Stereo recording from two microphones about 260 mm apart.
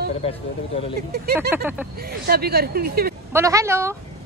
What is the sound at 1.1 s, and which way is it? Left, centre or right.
Speech, right.